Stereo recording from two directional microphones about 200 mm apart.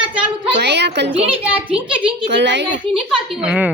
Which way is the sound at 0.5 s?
60° right (ahead or behind).